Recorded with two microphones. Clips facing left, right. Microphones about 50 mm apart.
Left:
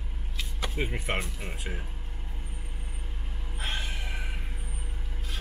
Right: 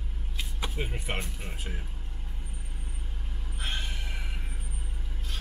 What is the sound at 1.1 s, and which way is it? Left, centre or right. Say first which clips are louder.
Speech: left 3 dB; left.